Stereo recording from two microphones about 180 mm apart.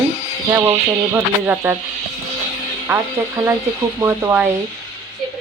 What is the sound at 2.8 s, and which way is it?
A woman's voice, 15° right (ahead or behind).